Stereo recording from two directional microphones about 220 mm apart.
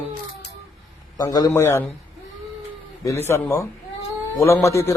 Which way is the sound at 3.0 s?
10° left (ahead or behind).